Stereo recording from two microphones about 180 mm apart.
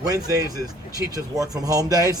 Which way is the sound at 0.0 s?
20° right (ahead or behind).